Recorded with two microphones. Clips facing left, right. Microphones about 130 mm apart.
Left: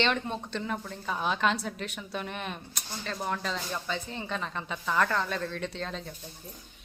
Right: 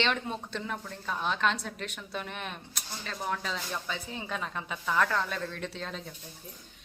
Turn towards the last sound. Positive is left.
turn(degrees=-5)  # may be behind; listen again after turning